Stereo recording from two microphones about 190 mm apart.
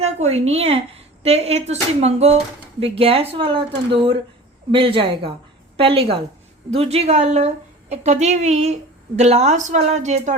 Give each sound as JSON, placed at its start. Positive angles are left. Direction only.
{"t": 0.0, "sound": "a woman's voice", "side_deg": -35}